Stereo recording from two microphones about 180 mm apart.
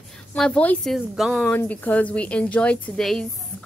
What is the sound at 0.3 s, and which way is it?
A woman's voice, 5° left (ahead or behind).